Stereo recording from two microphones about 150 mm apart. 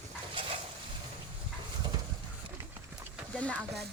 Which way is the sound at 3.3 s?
10° left (ahead or behind).